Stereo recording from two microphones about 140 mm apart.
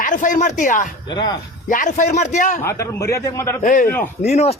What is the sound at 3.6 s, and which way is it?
Speech, 70° left (ahead or behind).